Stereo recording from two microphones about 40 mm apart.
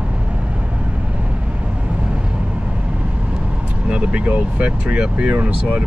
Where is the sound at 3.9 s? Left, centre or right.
Right.